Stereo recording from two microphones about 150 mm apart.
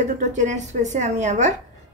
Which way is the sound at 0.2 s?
50° right (ahead or behind).